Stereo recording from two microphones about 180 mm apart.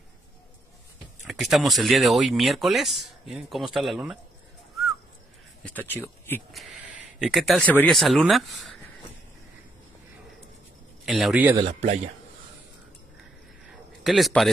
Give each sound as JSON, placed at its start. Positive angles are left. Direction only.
{"t": 1.2, "sound": "speech", "side_deg": 0}
{"t": 5.9, "sound": "speech", "side_deg": 10}
{"t": 6.5, "sound": "speech", "side_deg": 0}
{"t": 11.1, "sound": "speech", "side_deg": 0}
{"t": 11.5, "sound": "speech", "side_deg": -40}
{"t": 13.7, "sound": "a sound", "side_deg": 0}